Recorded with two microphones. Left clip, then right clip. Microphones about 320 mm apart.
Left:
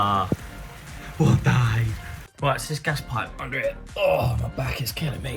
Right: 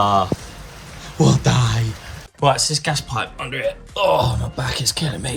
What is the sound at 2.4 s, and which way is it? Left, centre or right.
Speech, centre.